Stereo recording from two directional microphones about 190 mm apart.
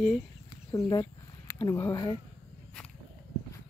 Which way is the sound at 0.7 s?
15° left (ahead or behind).